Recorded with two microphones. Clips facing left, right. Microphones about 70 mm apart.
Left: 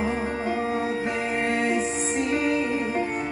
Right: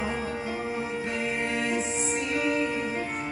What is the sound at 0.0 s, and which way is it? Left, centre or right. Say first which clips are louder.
Music: left 4 dB; left.